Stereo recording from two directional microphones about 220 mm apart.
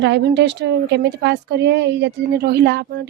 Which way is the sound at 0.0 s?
50° right (ahead or behind).